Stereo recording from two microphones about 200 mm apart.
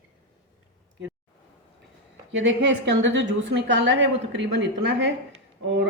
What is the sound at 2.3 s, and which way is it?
A woman's voice, 60° right (ahead or behind).